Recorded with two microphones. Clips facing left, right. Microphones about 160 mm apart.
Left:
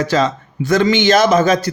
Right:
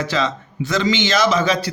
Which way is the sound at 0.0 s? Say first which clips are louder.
Left 5 dB; 45° left (ahead or behind).